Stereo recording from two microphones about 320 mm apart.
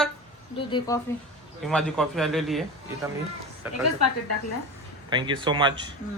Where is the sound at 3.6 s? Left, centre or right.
Centre.